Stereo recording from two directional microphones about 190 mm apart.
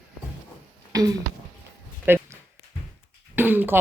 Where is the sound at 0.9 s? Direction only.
20° right (ahead or behind).